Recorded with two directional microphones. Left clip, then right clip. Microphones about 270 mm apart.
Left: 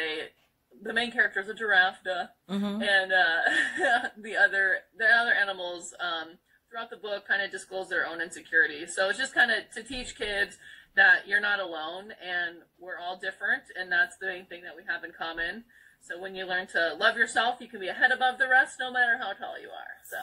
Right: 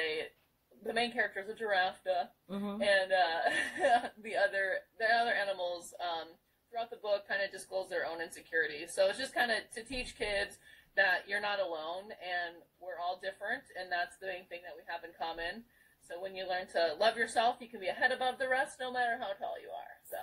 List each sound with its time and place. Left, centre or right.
0.8 s speech: centre
2.4 s speech: left
2.8 s speech: centre